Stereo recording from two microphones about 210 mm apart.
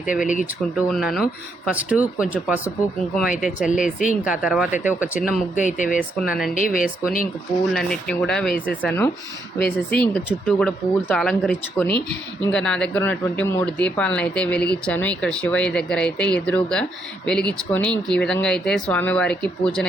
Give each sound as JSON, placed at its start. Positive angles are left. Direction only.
{"t": 0.2, "sound": "speech", "side_deg": 40}
{"t": 0.9, "sound": "speech", "side_deg": 0}
{"t": 3.4, "sound": "speech", "side_deg": 40}
{"t": 4.2, "sound": "speech", "side_deg": -5}
{"t": 5.5, "sound": "speech", "side_deg": 35}
{"t": 6.0, "sound": "speech", "side_deg": 5}
{"t": 6.7, "sound": "speech", "side_deg": 40}
{"t": 7.7, "sound": "speech", "side_deg": 5}
{"t": 9.6, "sound": "speech", "side_deg": 50}
{"t": 10.4, "sound": "speech", "side_deg": 5}